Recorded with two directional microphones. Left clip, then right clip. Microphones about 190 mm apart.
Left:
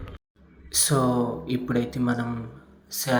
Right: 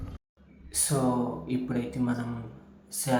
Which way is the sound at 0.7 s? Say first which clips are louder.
Left 5 dB; 20° left (ahead or behind).